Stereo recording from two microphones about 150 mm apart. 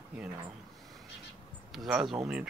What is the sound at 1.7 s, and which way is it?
Speech, centre (ahead or behind).